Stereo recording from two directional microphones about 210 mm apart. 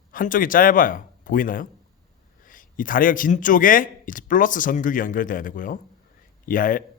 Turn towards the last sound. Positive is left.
turn(degrees=40)  # may be behind; listen again after turning